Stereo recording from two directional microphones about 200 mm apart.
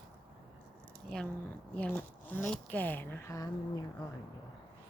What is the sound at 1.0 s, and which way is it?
Speech, 5° left (ahead or behind).